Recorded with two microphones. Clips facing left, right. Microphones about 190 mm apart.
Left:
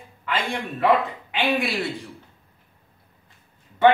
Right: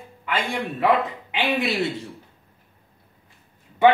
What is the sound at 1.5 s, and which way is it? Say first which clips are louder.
Speech: right 1 dB; 20° right (ahead or behind).